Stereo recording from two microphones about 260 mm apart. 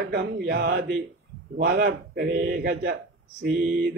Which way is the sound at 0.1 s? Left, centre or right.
Right.